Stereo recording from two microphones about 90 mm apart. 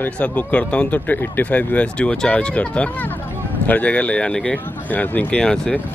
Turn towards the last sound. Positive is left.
turn(degrees=10)  # may be behind; listen again after turning